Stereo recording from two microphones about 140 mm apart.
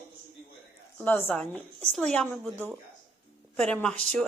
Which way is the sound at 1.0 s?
15° left (ahead or behind).